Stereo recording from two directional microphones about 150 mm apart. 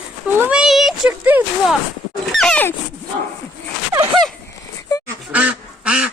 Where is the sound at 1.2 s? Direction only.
10° right (ahead or behind).